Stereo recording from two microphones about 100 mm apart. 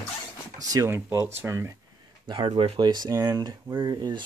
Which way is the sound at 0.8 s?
25° right (ahead or behind).